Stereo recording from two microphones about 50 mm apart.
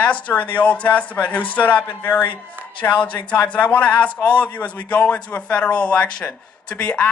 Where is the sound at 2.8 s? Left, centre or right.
Left.